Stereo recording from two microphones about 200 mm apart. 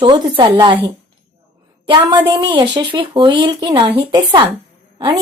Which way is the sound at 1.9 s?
20° right (ahead or behind).